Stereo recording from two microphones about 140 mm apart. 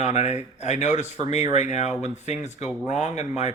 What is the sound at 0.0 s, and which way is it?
Speech, 55° left (ahead or behind).